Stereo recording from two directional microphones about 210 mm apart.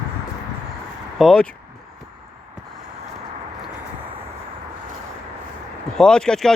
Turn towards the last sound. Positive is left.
turn(degrees=5)  # may be behind; listen again after turning